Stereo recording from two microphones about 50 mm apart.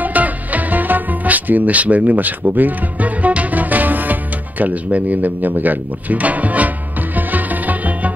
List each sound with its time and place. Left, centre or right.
0.0 s music: right